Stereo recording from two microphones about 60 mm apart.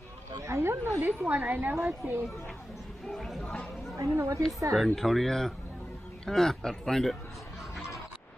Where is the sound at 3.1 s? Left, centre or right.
Centre.